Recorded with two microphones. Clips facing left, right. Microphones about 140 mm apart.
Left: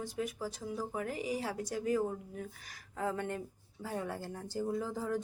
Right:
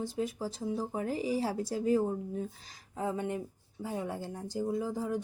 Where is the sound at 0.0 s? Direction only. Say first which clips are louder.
Right 3 dB; 30° right (ahead or behind).